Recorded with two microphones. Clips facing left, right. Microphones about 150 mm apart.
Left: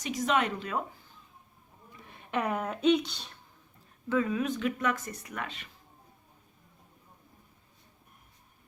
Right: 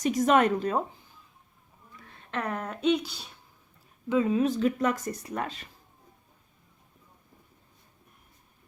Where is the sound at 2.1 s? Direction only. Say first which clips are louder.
Left 2 dB; 15° left (ahead or behind); by 3.3 s 5° right (ahead or behind).